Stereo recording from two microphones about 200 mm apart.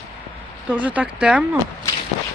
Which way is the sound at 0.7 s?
5° right (ahead or behind).